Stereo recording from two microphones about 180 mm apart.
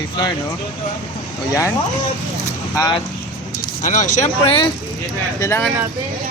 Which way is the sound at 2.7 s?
20° left (ahead or behind).